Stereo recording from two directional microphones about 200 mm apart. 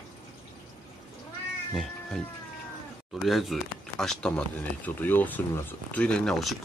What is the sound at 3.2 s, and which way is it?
Speech, centre (ahead or behind).